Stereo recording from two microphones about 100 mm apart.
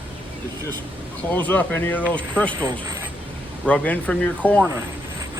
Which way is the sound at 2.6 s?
35° right (ahead or behind).